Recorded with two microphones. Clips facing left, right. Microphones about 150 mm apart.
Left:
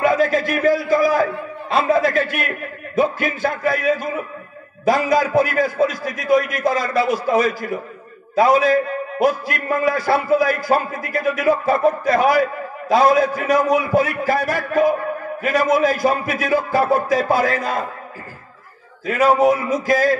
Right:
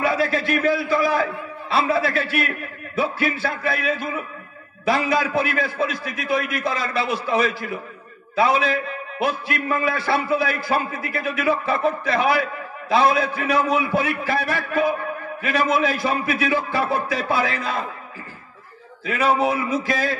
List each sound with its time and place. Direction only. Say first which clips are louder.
0.0 s a man's voice: left 5 dB; 45° left (ahead or behind)
19.0 s a man's voice: left 5 dB; 45° left (ahead or behind)